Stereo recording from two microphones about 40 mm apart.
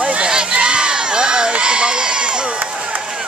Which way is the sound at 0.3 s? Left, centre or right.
Right.